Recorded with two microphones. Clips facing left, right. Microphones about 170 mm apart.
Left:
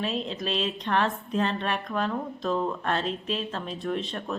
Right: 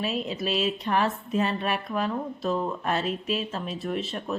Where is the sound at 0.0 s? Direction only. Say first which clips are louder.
Right 1 dB; 5° right (ahead or behind).